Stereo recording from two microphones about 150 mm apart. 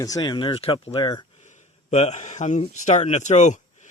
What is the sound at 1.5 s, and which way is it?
Speech, 50° left (ahead or behind).